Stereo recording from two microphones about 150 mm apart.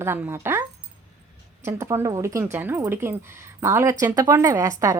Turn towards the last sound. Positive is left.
turn(degrees=-20)  # may be behind; listen again after turning